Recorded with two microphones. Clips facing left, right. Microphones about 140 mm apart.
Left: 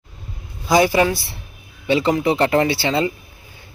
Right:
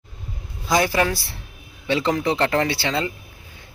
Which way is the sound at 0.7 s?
5° left (ahead or behind).